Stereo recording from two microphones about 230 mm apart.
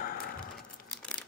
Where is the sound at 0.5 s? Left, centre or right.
Centre.